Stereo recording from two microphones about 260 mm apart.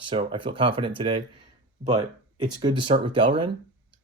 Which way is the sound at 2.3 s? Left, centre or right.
Centre.